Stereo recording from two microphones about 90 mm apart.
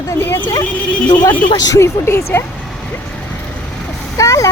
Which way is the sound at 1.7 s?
30° left (ahead or behind).